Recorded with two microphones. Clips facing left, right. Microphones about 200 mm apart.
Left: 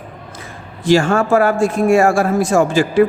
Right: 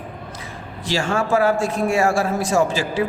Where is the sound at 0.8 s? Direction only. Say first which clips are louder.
Left 8 dB; 50° left (ahead or behind).